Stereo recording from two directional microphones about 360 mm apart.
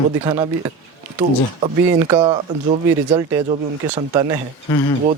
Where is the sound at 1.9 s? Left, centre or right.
Centre.